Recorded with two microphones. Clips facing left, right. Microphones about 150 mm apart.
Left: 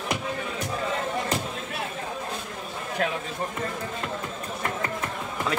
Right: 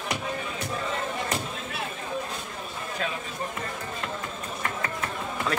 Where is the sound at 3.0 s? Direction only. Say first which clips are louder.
Left 5 dB; 60° left (ahead or behind).